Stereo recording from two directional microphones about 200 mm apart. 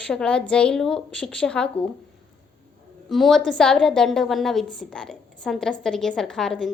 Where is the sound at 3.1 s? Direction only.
Centre (ahead or behind).